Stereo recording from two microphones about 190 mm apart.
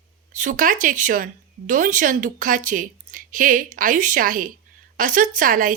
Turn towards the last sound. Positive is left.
turn(degrees=-45)  # may be behind; listen again after turning